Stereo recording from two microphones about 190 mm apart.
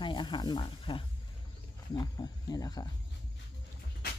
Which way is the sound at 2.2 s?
20° left (ahead or behind).